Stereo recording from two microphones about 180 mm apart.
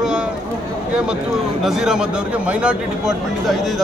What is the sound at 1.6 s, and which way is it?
A man's voice, 5° right (ahead or behind).